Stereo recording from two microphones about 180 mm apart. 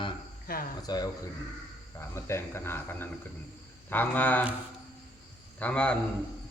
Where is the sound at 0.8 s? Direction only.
20° left (ahead or behind).